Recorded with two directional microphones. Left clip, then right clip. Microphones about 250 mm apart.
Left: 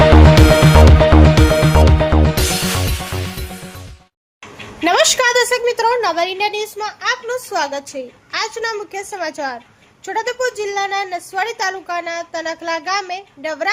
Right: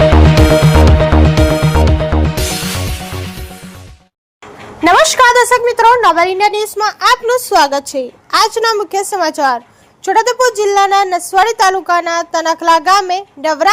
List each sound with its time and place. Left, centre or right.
0.1 s music: centre
4.8 s a sound: centre
6.4 s speech: centre